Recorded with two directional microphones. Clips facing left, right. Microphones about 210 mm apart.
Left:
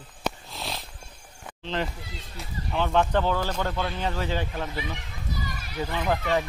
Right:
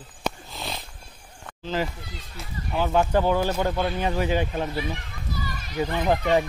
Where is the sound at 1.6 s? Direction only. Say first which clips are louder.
Right 2 dB; 5° right (ahead or behind).